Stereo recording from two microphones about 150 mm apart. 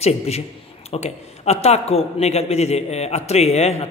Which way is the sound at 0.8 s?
45° left (ahead or behind).